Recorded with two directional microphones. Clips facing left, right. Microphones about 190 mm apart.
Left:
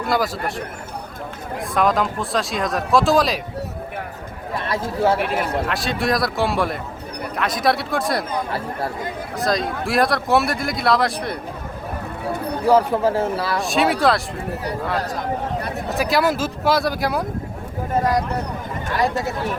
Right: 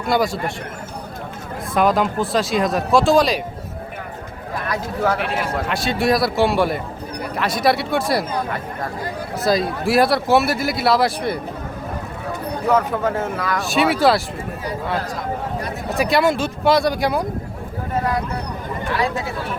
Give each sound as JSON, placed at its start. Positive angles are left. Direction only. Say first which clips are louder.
{"t": 0.1, "sound": "speech", "louder": "right 3 dB", "side_deg": 0}
{"t": 1.7, "sound": "speech", "louder": "right 2 dB", "side_deg": 0}
{"t": 4.6, "sound": "speech", "louder": "left 2 dB", "side_deg": 30}
{"t": 5.6, "sound": "speech", "louder": "right 3 dB", "side_deg": 0}
{"t": 9.4, "sound": "speech", "louder": "right 3 dB", "side_deg": -5}
{"t": 12.6, "sound": "speech", "louder": "left 3 dB", "side_deg": 30}
{"t": 13.6, "sound": "speech", "louder": "right 2 dB", "side_deg": 0}
{"t": 16.0, "sound": "speech", "louder": "right 2 dB", "side_deg": 0}